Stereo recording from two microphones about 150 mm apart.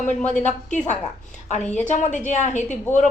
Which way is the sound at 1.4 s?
50° left (ahead or behind).